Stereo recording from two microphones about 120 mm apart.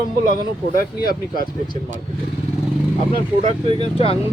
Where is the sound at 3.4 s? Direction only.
65° right (ahead or behind).